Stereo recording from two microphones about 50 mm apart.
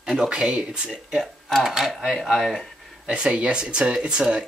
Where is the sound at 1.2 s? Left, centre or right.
Centre.